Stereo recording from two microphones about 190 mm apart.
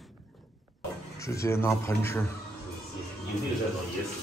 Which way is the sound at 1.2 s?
15° left (ahead or behind).